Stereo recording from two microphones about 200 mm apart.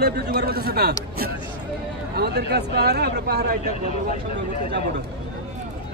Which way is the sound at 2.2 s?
55° right (ahead or behind).